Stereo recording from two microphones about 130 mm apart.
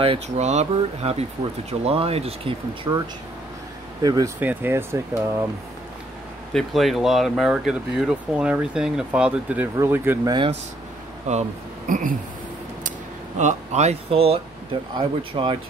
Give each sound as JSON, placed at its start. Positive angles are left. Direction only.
{"t": 0.0, "sound": "speech", "side_deg": -50}
{"t": 4.0, "sound": "speech", "side_deg": -30}
{"t": 4.4, "sound": "speech", "side_deg": -15}
{"t": 6.5, "sound": "speech", "side_deg": 0}
{"t": 10.2, "sound": "speech", "side_deg": -35}
{"t": 11.3, "sound": "speech", "side_deg": -65}
{"t": 11.9, "sound": "speech", "side_deg": -90}
{"t": 13.4, "sound": "speech", "side_deg": -65}